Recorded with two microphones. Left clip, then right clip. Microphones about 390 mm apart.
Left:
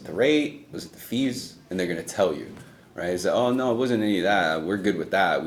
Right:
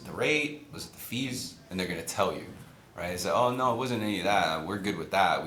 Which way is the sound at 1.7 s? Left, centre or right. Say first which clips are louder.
Left 5 dB; right.